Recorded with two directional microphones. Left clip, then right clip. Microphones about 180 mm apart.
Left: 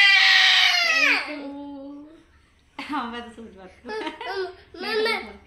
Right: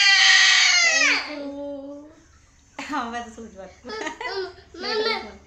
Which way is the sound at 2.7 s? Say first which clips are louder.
Right 1 dB; 25° right (ahead or behind).